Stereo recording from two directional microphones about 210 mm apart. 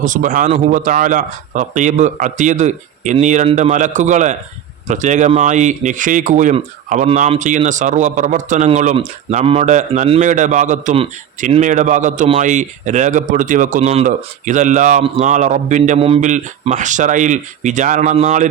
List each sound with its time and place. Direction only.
0.0 s speech: 40° right (ahead or behind)